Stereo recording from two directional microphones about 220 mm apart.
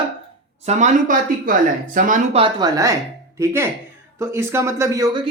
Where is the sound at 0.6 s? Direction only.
30° right (ahead or behind).